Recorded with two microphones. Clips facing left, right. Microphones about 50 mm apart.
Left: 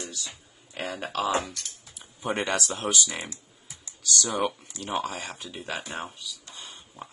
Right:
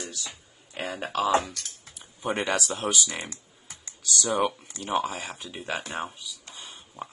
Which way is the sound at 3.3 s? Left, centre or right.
Right.